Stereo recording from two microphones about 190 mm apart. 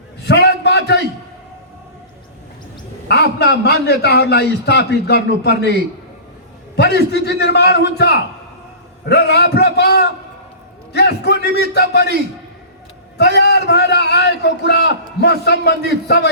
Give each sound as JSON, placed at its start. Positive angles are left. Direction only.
{"t": 0.3, "sound": "a sound", "side_deg": 60}
{"t": 3.1, "sound": "a man's voice", "side_deg": 60}
{"t": 6.7, "sound": "a man's voice", "side_deg": 60}
{"t": 13.1, "sound": "a man's voice", "side_deg": 60}